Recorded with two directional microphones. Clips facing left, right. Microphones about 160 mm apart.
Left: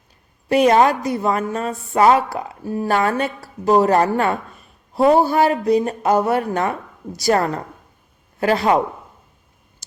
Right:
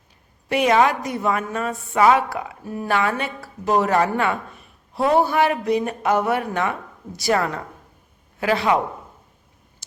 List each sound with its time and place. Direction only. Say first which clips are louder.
0.4 s a woman's voice: left 4 dB; 40° left (ahead or behind)